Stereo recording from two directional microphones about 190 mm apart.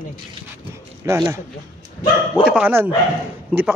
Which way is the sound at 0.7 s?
15° right (ahead or behind).